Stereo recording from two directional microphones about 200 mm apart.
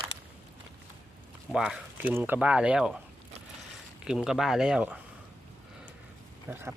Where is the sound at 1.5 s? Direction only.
5° right (ahead or behind).